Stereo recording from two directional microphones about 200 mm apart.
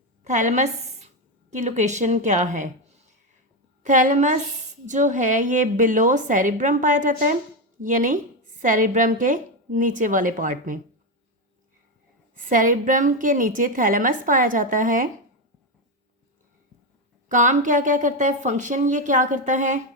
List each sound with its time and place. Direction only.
0.3 s a woman's voice: 35° right (ahead or behind)
3.8 s a woman's voice: 40° right (ahead or behind)
12.3 s a woman's voice: 40° right (ahead or behind)
17.2 s a woman's voice: 40° right (ahead or behind)